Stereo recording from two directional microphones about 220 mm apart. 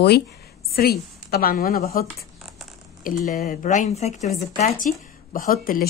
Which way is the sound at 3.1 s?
35° left (ahead or behind).